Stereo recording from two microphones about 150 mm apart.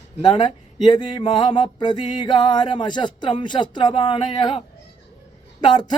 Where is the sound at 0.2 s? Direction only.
30° left (ahead or behind).